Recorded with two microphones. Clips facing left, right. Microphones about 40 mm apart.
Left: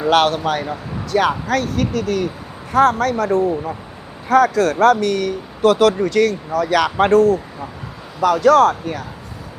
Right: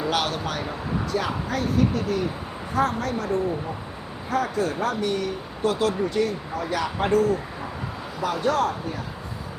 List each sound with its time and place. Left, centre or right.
0.1 s speech: left
1.1 s a woman's voice: left
8.2 s speech: left